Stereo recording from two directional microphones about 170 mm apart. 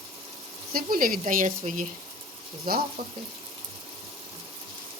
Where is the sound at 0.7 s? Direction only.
55° right (ahead or behind).